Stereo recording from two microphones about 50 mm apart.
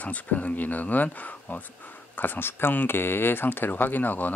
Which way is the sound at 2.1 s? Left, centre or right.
Left.